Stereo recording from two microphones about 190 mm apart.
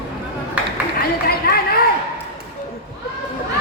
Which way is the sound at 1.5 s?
55° left (ahead or behind).